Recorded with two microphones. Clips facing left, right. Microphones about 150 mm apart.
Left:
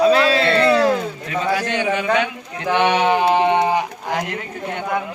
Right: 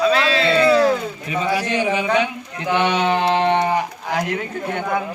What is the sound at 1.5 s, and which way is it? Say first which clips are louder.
Speech: even; 5° right (ahead or behind).